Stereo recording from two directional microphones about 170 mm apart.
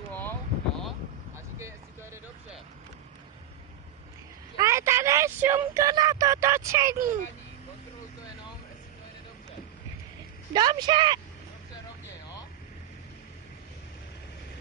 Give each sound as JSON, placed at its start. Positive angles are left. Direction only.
{"t": 0.1, "sound": "wind noise", "side_deg": 10}
{"t": 4.6, "sound": "a sound", "side_deg": -15}
{"t": 10.5, "sound": "a woman's voice", "side_deg": -25}